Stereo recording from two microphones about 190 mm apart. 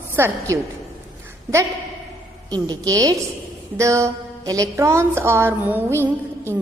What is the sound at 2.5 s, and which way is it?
A woman's voice, 20° right (ahead or behind).